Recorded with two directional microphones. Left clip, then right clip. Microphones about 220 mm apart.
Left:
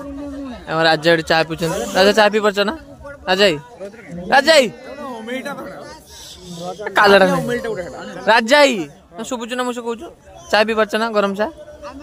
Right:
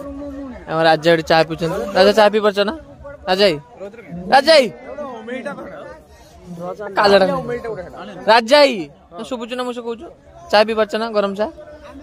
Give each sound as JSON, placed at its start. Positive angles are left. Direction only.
{"t": 0.7, "sound": "a man's voice", "side_deg": -5}
{"t": 4.8, "sound": "chatter", "side_deg": 50}
{"t": 6.9, "sound": "a man's voice", "side_deg": 5}
{"t": 7.2, "sound": "a man's voice", "side_deg": 50}
{"t": 8.0, "sound": "a man's voice", "side_deg": 15}
{"t": 8.3, "sound": "a man's voice", "side_deg": 0}